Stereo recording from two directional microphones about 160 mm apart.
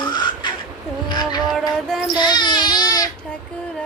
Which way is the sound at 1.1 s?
25° left (ahead or behind).